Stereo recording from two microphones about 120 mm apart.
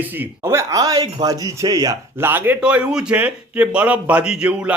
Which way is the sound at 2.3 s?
15° right (ahead or behind).